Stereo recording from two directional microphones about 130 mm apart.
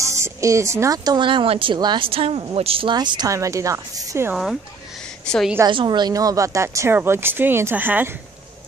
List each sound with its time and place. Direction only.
0.0 s speech: 25° right (ahead or behind)
4.3 s speech: centre (ahead or behind)
5.7 s speech: 35° right (ahead or behind); by 8.1 s 15° right (ahead or behind)